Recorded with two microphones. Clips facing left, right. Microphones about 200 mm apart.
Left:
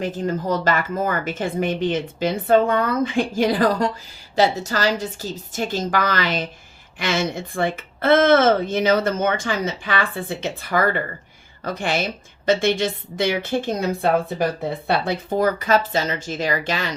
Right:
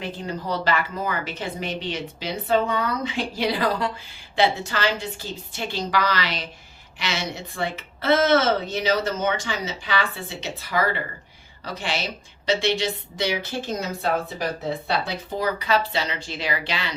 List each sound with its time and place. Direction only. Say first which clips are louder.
0.0 s a woman's voice: left 7 dB; 45° left (ahead or behind)